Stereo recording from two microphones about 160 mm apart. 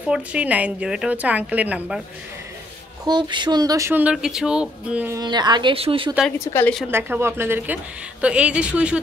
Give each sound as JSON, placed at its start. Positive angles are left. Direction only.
{"t": 0.1, "sound": "a woman's voice", "side_deg": -5}
{"t": 3.1, "sound": "a woman's voice", "side_deg": -30}
{"t": 5.1, "sound": "speech", "side_deg": -25}
{"t": 6.4, "sound": "a woman's voice", "side_deg": 15}
{"t": 6.9, "sound": "a woman's voice", "side_deg": -15}